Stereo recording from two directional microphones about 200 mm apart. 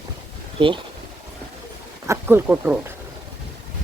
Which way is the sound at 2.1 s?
10° right (ahead or behind).